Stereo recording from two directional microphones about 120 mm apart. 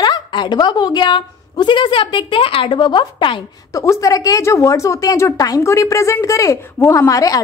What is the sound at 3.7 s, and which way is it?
A woman's voice, 30° left (ahead or behind).